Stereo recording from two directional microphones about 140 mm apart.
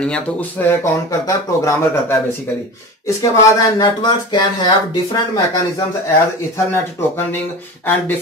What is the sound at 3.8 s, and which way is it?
Speech, 30° left (ahead or behind).